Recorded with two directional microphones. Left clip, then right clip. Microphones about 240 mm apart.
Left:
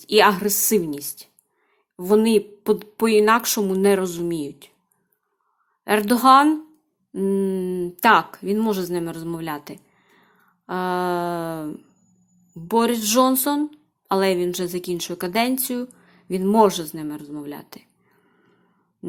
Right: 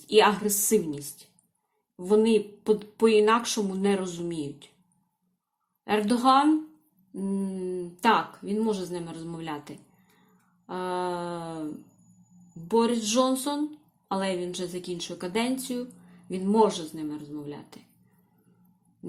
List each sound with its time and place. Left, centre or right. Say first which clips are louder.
0.0 s speech: left 5 dB; left
5.8 s speech: left 7 dB; left